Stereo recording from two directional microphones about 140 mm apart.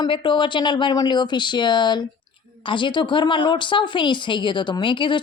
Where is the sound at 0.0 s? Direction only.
35° left (ahead or behind).